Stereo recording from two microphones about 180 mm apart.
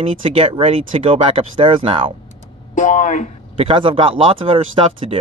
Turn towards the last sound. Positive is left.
turn(degrees=-30)  # may be behind; listen again after turning